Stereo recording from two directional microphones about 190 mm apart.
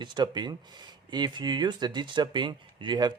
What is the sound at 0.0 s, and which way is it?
Speech, 25° right (ahead or behind).